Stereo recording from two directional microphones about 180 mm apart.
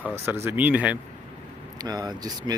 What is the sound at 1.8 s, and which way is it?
Speech, 20° right (ahead or behind).